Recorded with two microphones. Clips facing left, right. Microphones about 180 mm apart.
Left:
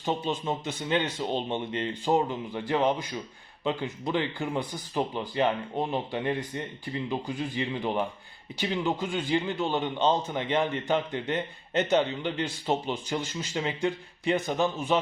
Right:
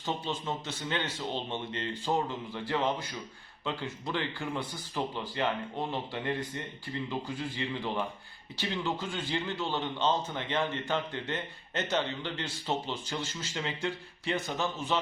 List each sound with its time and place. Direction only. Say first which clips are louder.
0.0 s a man's voice: left 5 dB; 20° left (ahead or behind)